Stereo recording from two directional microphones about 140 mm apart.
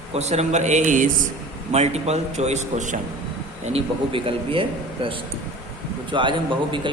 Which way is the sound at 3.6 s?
40° right (ahead or behind).